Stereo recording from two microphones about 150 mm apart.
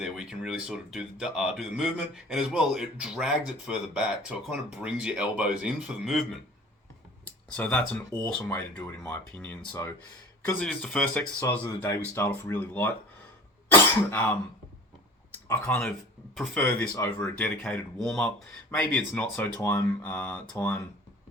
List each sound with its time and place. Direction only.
0.0 s speech: 5° right (ahead or behind)
7.5 s speech: 10° left (ahead or behind)
14.1 s speech: 15° left (ahead or behind)
15.3 s clicking: 10° left (ahead or behind)
16.6 s speech: 10° left (ahead or behind)